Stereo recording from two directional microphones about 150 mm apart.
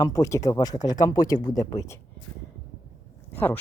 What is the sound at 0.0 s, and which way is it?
Speech, 20° left (ahead or behind).